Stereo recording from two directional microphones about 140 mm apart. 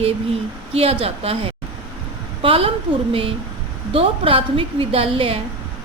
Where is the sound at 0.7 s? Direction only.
45° right (ahead or behind).